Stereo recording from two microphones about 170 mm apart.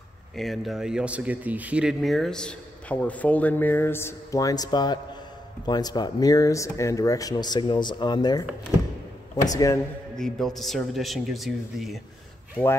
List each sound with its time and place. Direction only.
0.4 s speech: centre (ahead or behind); by 9.8 s 20° left (ahead or behind)
10.1 s speech: centre (ahead or behind)